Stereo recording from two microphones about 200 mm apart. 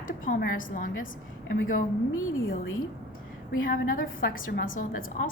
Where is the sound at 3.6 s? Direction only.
45° left (ahead or behind).